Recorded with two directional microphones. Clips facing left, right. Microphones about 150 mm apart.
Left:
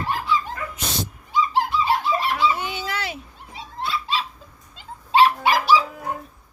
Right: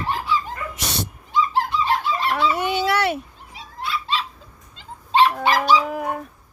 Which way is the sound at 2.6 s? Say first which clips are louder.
Right 8 dB; 65° right (ahead or behind).